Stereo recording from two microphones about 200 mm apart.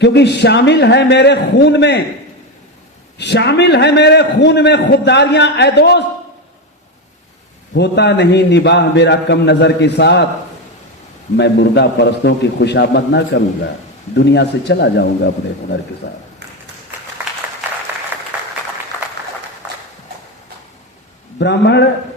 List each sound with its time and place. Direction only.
0.0 s a man's voice: 60° left (ahead or behind)
3.2 s a man's voice: 60° left (ahead or behind)
7.7 s a man's voice: 60° left (ahead or behind)
11.3 s a man's voice: 60° left (ahead or behind)
18.1 s applause: 10° right (ahead or behind)
21.3 s a man's voice: 60° left (ahead or behind)